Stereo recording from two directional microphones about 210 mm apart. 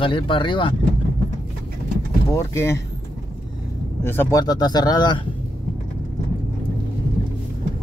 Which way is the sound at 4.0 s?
10° left (ahead or behind).